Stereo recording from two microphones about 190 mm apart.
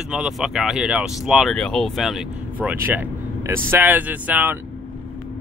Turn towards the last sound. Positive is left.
turn(degrees=-10)  # may be behind; listen again after turning